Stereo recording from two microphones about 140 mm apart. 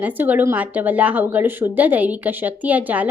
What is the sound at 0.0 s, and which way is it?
Speech, 10° right (ahead or behind).